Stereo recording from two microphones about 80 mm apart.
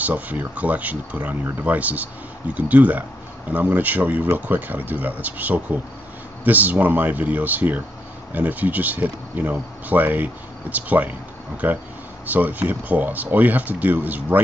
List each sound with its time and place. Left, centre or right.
0.0 s speech: centre